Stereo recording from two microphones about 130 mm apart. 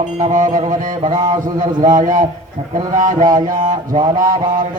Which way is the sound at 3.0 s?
75° right (ahead or behind).